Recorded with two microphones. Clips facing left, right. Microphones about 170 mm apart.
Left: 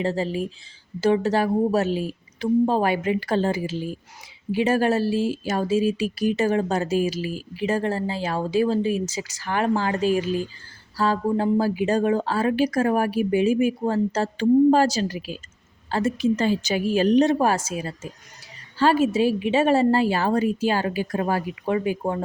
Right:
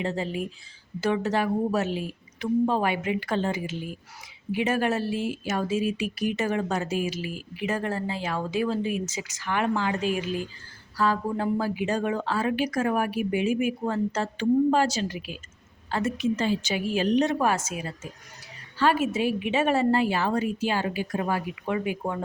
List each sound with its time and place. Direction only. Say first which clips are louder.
0.0 s speech: left 4 dB; 35° left (ahead or behind)